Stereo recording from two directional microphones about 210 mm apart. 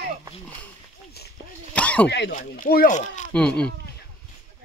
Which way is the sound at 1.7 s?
5° left (ahead or behind).